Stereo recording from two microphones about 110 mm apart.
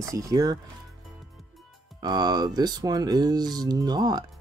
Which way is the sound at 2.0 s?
40° right (ahead or behind).